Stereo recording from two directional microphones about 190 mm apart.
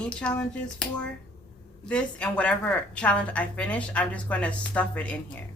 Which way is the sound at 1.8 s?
5° left (ahead or behind).